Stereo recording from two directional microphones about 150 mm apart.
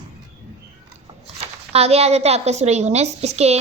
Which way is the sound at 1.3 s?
45° right (ahead or behind).